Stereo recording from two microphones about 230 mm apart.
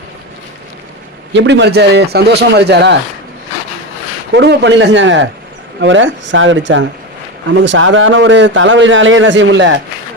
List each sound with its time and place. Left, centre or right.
1.3 s a man's voice: right
4.4 s a man's voice: right